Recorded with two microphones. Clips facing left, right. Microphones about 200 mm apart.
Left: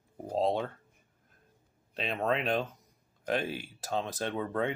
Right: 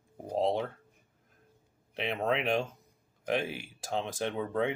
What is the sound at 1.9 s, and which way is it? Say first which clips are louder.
Speech: even; 15° right (ahead or behind).